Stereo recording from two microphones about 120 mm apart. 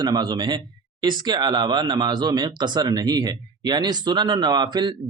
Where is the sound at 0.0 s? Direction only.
35° right (ahead or behind).